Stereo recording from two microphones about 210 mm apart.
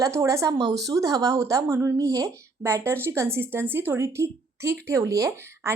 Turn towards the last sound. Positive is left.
turn(degrees=-15)  # may be behind; listen again after turning